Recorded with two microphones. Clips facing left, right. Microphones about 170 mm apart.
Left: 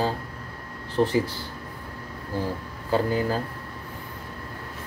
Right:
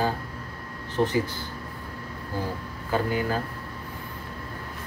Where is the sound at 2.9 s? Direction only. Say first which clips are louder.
Left 2 dB; 35° left (ahead or behind).